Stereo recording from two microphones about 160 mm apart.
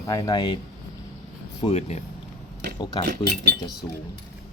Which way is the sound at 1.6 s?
40° left (ahead or behind).